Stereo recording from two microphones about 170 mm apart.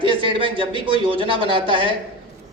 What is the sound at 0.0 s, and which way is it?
A man's voice, 30° right (ahead or behind).